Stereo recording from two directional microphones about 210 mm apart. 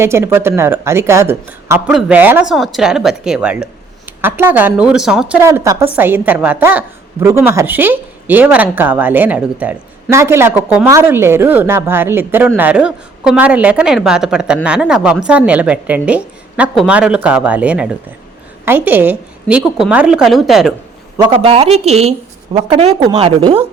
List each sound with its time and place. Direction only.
0.0 s a woman's voice: 10° right (ahead or behind)
5.4 s a woman's voice: 15° right (ahead or behind)
21.2 s speech: 25° right (ahead or behind)